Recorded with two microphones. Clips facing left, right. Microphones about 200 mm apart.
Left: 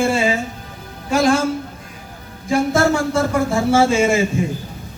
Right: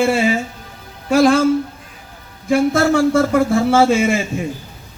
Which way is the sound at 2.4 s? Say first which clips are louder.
Right 2 dB; 55° right (ahead or behind).